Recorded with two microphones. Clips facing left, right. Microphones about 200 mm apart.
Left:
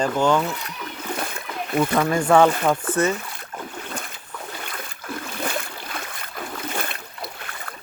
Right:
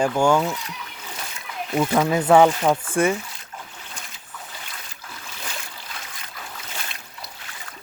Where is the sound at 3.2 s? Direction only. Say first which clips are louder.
Left 4 dB; 60° left (ahead or behind).